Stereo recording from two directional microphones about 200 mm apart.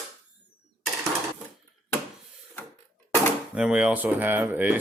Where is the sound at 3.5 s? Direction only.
5° right (ahead or behind).